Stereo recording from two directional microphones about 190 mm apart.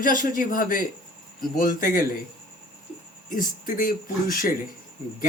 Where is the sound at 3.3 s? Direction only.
45° left (ahead or behind).